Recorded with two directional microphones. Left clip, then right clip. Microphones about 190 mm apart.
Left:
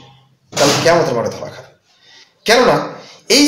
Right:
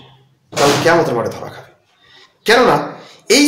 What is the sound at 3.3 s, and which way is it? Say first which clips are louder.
Speech: even; 20° right (ahead or behind).